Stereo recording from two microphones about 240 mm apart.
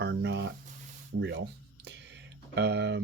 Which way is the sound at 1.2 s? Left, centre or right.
Right.